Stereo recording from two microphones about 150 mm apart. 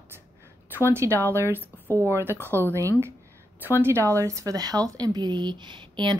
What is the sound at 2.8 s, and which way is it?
Speech, 20° right (ahead or behind).